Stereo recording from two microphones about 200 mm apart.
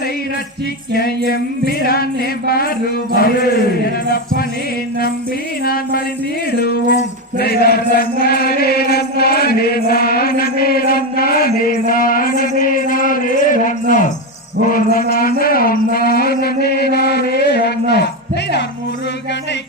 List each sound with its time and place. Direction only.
0.9 s female singing: 50° left (ahead or behind)
3.2 s female singing: 50° left (ahead or behind)
5.6 s female singing: 50° left (ahead or behind)
6.6 s music: 50° left (ahead or behind)
14.6 s a sound: 45° left (ahead or behind)